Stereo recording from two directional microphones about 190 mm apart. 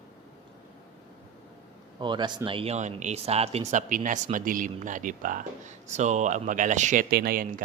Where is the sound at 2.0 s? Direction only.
25° right (ahead or behind).